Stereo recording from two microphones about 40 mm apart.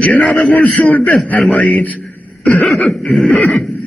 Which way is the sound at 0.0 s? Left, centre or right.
Left.